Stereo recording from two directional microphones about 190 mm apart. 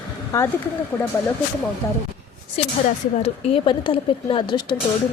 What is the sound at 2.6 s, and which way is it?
A woman's voice, 30° left (ahead or behind).